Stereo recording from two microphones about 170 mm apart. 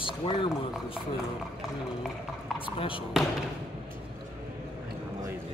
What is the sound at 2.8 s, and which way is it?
Speech, 30° left (ahead or behind).